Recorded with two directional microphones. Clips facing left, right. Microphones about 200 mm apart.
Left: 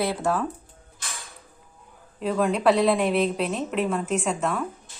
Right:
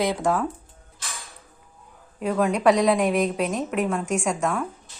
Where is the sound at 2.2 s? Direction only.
5° right (ahead or behind).